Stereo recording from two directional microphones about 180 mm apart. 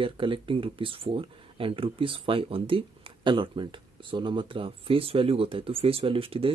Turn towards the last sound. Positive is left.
turn(degrees=-30)  # may be behind; listen again after turning